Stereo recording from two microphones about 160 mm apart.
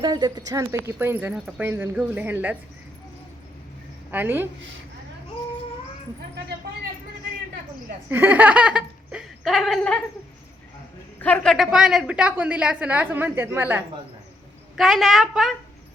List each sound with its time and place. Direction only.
0.0 s a woman's voice: 25° right (ahead or behind)
4.1 s a woman's voice: 10° right (ahead or behind)
8.1 s laughter: 10° right (ahead or behind); by 10.0 s 5° left (ahead or behind)
11.2 s a man's voice: 10° left (ahead or behind)
11.5 s a woman's voice: centre (ahead or behind)
14.8 s a woman's voice: centre (ahead or behind)